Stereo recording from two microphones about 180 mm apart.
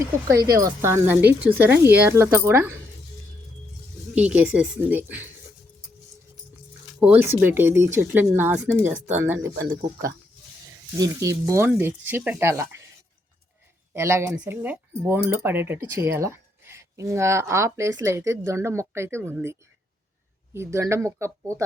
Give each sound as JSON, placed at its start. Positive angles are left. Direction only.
{"t": 0.3, "sound": "speech", "side_deg": -20}
{"t": 4.1, "sound": "speech", "side_deg": -10}
{"t": 7.0, "sound": "speech", "side_deg": -10}
{"t": 10.9, "sound": "speech", "side_deg": -20}
{"t": 13.9, "sound": "speech", "side_deg": -15}